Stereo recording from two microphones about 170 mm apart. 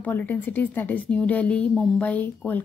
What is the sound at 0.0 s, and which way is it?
A woman's voice, 10° left (ahead or behind).